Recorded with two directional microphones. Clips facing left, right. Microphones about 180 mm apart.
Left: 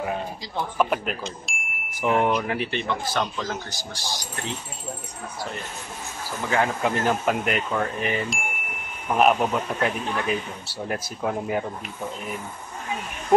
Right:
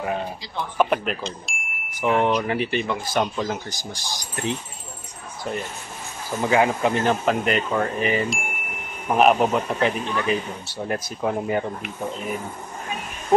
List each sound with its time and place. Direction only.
0.7 s speech: centre (ahead or behind); by 4.6 s 15° right (ahead or behind)
6.8 s speech: 5° left (ahead or behind)